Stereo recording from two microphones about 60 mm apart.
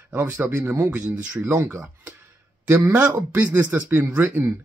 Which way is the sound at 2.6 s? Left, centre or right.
Right.